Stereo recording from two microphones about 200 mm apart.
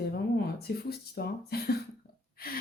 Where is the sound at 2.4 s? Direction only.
50° left (ahead or behind).